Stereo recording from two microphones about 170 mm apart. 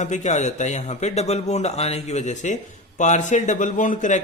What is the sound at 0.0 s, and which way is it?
A man's voice, 45° left (ahead or behind).